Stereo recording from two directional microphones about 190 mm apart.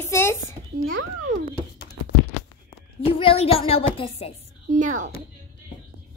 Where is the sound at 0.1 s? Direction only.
15° left (ahead or behind).